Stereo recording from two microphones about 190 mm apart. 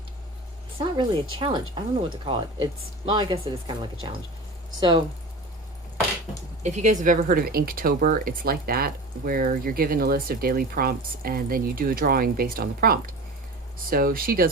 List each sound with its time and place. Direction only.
0.8 s speech: 30° right (ahead or behind)
6.6 s speech: 35° right (ahead or behind)